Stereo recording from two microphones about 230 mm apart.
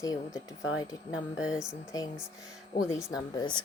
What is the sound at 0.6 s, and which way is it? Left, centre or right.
Speech, left.